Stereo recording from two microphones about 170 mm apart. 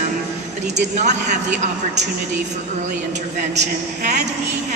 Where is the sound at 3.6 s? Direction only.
45° right (ahead or behind).